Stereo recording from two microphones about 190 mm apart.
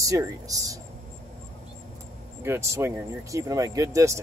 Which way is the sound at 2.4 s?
15° right (ahead or behind).